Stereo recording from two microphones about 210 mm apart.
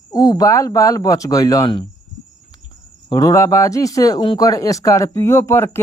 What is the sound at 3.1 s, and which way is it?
Speech, 15° left (ahead or behind).